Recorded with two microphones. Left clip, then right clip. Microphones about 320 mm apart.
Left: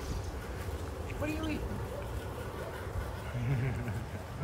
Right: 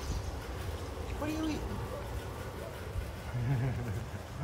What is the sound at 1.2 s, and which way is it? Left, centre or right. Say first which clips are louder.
Speech: right 1 dB; centre.